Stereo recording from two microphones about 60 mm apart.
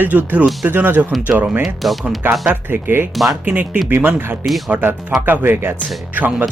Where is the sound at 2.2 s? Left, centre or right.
Right.